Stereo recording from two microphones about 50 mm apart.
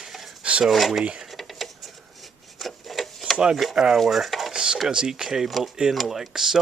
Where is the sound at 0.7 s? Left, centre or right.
Centre.